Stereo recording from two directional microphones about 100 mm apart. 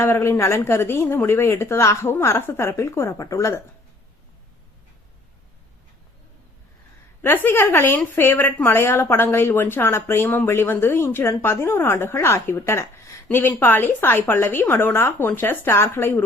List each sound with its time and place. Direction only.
0.0 s a woman's voice: 25° left (ahead or behind)
7.2 s a woman's voice: 20° left (ahead or behind)